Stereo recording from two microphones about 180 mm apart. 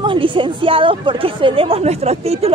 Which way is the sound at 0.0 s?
25° right (ahead or behind).